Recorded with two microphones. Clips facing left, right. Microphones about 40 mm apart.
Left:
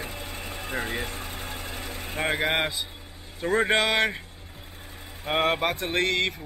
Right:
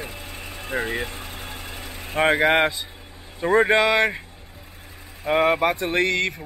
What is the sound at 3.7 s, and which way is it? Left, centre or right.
Speech, centre.